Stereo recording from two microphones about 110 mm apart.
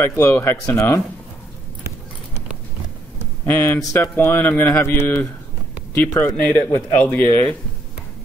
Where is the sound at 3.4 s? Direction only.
20° left (ahead or behind).